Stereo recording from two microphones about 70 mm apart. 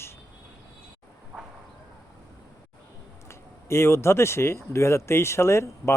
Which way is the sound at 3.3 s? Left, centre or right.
Left.